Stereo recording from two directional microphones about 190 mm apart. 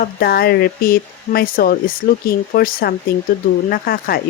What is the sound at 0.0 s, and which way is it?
Speech, 55° left (ahead or behind).